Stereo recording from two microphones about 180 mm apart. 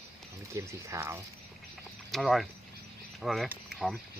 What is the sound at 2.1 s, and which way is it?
Speech, centre (ahead or behind).